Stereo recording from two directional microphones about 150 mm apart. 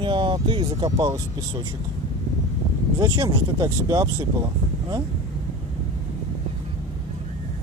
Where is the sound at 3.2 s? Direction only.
25° right (ahead or behind).